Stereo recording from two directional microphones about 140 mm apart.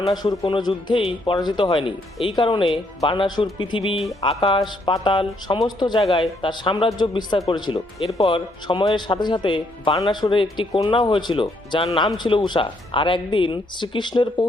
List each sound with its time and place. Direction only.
0.1 s a man's voice: 30° left (ahead or behind)